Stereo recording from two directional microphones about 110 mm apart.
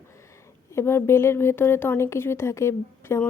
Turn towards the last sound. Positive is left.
turn(degrees=25)  # may be behind; listen again after turning